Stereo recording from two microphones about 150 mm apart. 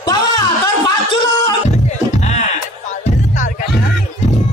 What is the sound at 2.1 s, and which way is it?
Music, 50° left (ahead or behind).